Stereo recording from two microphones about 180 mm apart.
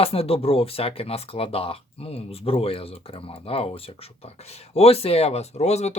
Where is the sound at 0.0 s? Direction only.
30° left (ahead or behind).